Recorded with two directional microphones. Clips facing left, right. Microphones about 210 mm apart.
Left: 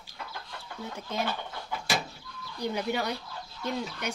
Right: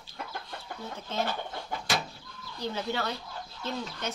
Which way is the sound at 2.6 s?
15° left (ahead or behind).